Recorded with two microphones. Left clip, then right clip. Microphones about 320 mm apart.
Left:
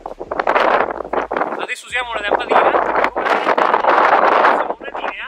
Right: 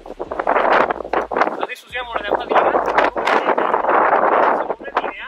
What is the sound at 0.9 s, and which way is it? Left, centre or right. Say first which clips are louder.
Wind noise: right 1 dB; centre.